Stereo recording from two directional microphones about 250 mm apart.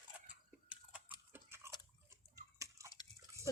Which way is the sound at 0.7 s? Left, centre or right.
Centre.